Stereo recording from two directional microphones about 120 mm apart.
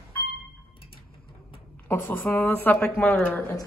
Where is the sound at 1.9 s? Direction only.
15° left (ahead or behind).